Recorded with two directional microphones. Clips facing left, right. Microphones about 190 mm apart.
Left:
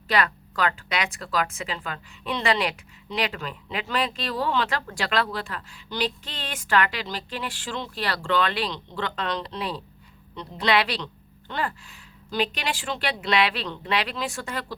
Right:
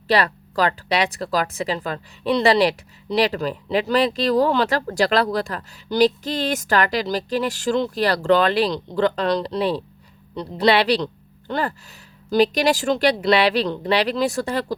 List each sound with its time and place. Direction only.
0.1 s speech: 35° right (ahead or behind)